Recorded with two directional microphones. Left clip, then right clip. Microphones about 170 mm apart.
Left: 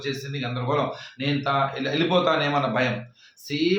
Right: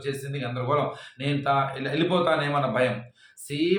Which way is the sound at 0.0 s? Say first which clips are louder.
Left 1 dB; 15° right (ahead or behind).